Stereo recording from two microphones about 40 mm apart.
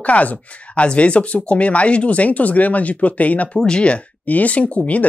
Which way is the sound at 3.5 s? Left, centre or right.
Left.